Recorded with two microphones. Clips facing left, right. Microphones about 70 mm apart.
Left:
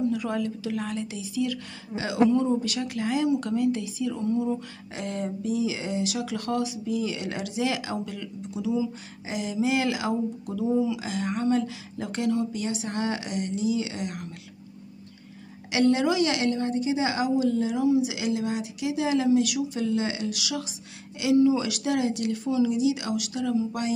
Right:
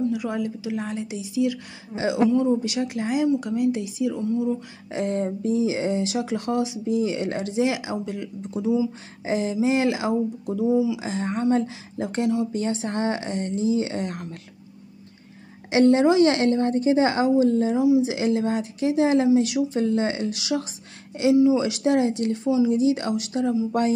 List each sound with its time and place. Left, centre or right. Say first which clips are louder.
0.1 s speech: right 1 dB; centre
2.2 s speech: right 1 dB; centre
2.6 s speech: right 3 dB; right
4.1 s speech: even; centre
4.9 s speech: right 6 dB; right
8.4 s a woman's voice: right 4 dB; right
10.7 s speech: right 3 dB; centre
11.0 s a woman's voice: right 3 dB; right
15.7 s a woman's voice: right 5 dB; right